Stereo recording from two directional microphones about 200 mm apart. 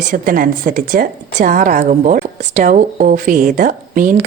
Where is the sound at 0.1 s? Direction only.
45° right (ahead or behind).